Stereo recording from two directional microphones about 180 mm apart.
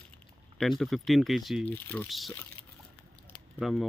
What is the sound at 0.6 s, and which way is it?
Speech, centre (ahead or behind).